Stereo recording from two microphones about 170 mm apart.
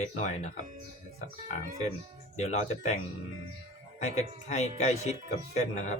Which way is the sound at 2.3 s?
40° left (ahead or behind).